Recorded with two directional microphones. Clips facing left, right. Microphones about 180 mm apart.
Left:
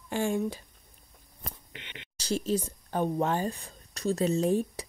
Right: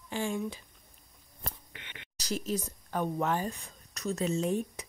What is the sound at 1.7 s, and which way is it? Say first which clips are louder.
Speech: left 3 dB; 25° left (ahead or behind).